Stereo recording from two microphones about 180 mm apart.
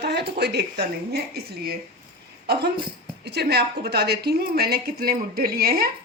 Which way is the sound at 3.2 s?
65° right (ahead or behind).